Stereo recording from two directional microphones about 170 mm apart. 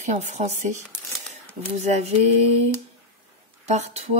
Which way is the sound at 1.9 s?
40° right (ahead or behind).